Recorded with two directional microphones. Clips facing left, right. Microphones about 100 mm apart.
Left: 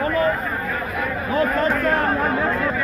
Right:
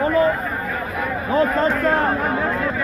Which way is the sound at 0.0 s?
25° right (ahead or behind).